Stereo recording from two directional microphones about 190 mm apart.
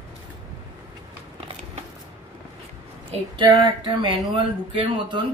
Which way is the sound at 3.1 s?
25° right (ahead or behind).